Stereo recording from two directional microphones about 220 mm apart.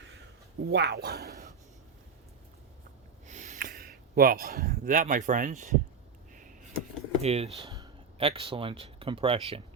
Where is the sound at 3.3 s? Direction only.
35° right (ahead or behind).